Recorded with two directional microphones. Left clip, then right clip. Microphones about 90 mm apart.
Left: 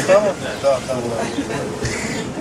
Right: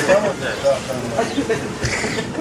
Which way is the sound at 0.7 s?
15° left (ahead or behind).